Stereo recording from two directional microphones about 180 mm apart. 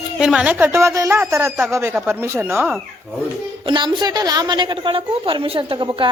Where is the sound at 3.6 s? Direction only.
25° right (ahead or behind).